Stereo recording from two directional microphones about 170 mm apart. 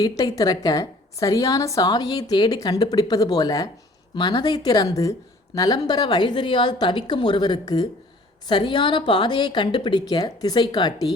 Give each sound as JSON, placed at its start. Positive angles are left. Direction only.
{"t": 0.3, "sound": "a woman's voice", "side_deg": 20}